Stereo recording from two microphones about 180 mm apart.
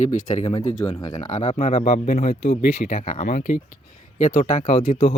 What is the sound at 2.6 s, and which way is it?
Speech, 55° left (ahead or behind).